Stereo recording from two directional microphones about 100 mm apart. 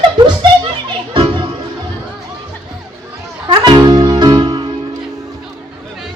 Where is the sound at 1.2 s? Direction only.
50° right (ahead or behind).